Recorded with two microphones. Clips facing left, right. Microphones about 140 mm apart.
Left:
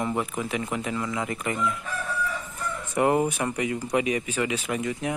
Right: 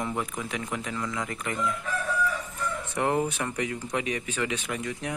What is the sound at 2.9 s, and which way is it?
Speech, 10° left (ahead or behind).